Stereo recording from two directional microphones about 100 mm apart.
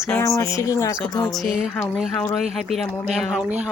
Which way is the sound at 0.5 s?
35° left (ahead or behind).